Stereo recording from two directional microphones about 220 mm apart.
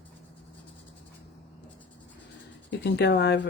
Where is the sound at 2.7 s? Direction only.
50° left (ahead or behind).